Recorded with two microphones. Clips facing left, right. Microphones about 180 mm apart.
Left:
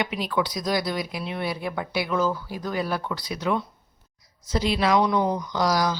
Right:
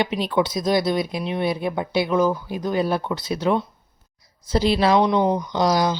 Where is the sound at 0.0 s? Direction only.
25° right (ahead or behind).